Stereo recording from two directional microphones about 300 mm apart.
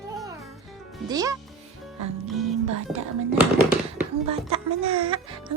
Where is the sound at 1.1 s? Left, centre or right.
Centre.